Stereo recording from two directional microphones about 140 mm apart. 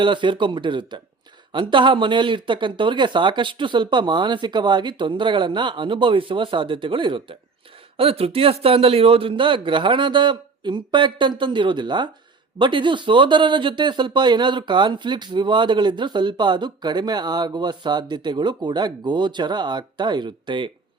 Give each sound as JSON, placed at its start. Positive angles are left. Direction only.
{"t": 0.0, "sound": "speech", "side_deg": -35}